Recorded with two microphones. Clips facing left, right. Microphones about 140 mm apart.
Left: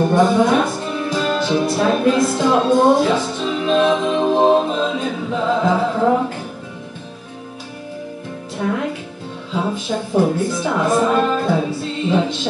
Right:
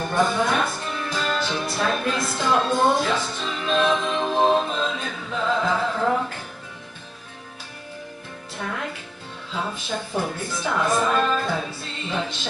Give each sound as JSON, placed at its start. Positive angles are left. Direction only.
{"t": 0.0, "sound": "music", "side_deg": 25}
{"t": 0.3, "sound": "music", "side_deg": 10}
{"t": 2.3, "sound": "speech", "side_deg": 10}
{"t": 4.4, "sound": "a capella", "side_deg": 10}
{"t": 8.5, "sound": "speech", "side_deg": 10}